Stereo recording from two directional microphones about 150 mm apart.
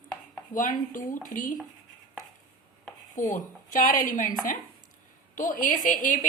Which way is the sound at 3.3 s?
60° left (ahead or behind).